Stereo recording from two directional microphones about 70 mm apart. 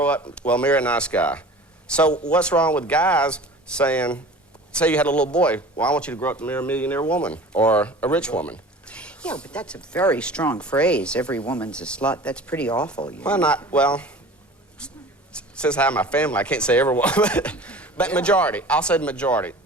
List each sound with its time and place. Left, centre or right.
0.4 s speech: centre
14.8 s a sound: centre
15.4 s speech: centre